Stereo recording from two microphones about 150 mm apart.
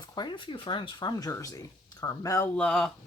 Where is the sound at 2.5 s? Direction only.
5° left (ahead or behind).